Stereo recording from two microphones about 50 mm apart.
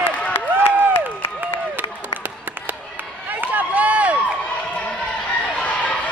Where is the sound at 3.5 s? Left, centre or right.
Right.